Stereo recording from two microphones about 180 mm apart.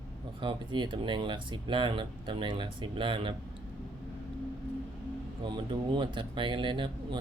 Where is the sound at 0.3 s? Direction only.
25° right (ahead or behind).